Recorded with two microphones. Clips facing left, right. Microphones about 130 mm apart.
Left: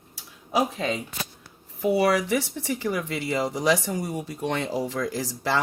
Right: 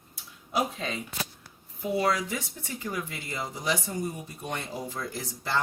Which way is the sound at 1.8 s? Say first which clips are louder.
Left 6 dB; 80° left.